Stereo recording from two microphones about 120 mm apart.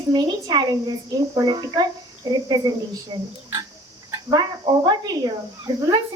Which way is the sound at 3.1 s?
45° right (ahead or behind).